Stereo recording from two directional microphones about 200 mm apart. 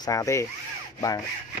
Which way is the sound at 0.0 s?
15° left (ahead or behind).